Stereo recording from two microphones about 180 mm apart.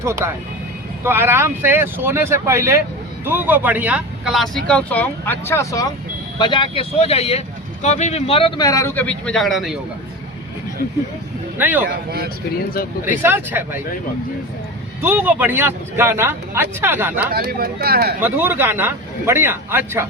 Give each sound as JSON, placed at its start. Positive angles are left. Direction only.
{"t": 0.0, "sound": "speech", "side_deg": -15}
{"t": 11.5, "sound": "speech", "side_deg": -10}
{"t": 13.1, "sound": "speech", "side_deg": -10}
{"t": 15.0, "sound": "speech", "side_deg": -10}
{"t": 17.3, "sound": "speech", "side_deg": -55}
{"t": 18.2, "sound": "speech", "side_deg": -10}